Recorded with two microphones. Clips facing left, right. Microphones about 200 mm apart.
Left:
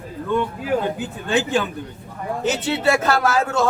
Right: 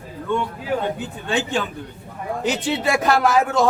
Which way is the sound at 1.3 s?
5° left (ahead or behind).